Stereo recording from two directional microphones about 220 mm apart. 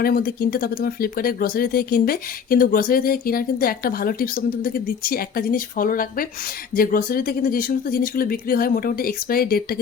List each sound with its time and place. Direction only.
0.0 s speech: 45° left (ahead or behind)